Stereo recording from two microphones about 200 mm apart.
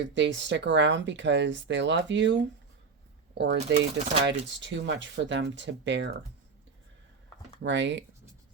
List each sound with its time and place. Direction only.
0.0 s speech: 65° right (ahead or behind)
3.8 s speech: 40° right (ahead or behind)
4.3 s speech: 60° right (ahead or behind)
7.6 s speech: 65° right (ahead or behind)